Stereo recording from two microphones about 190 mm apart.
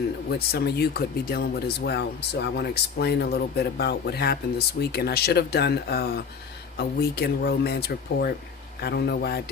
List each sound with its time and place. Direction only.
0.3 s speech: 55° left (ahead or behind)